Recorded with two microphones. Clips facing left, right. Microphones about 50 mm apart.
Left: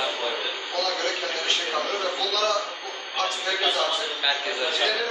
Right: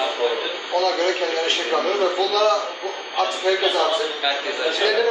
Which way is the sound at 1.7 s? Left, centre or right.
Right.